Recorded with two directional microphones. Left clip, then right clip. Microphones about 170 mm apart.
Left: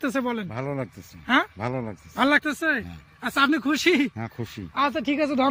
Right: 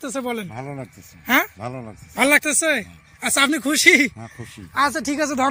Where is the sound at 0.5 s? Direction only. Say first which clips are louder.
Left 2 dB; 40° left (ahead or behind).